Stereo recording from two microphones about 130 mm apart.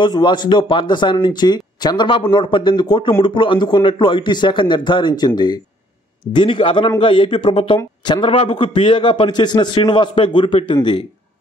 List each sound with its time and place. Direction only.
0.0 s speech: 35° left (ahead or behind)
6.3 s speech: 40° left (ahead or behind)